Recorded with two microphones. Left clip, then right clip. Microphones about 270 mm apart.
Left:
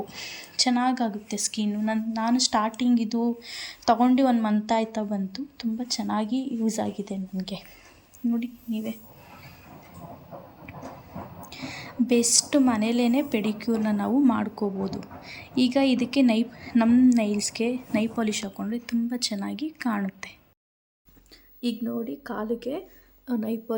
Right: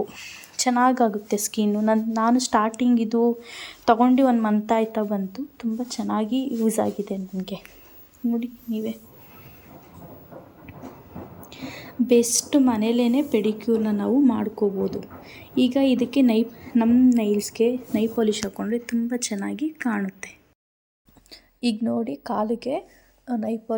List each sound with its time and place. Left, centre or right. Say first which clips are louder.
0.1 s a woman's voice: left 1 dB; centre
11.4 s a woman's voice: even; centre
21.6 s a woman's voice: right 5 dB; right